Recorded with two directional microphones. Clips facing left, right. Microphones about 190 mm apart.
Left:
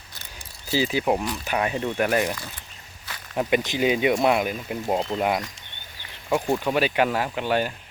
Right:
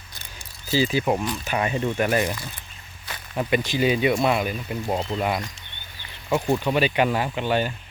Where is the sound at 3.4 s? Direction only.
15° left (ahead or behind).